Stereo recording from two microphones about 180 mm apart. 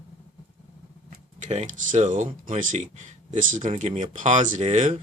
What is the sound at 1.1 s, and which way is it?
Speech, 40° right (ahead or behind).